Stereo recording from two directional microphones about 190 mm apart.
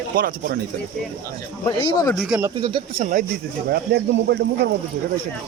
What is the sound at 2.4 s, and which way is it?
Speech, 15° right (ahead or behind).